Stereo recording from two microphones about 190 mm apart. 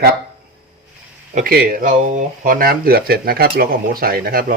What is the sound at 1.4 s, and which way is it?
Speech, 45° right (ahead or behind).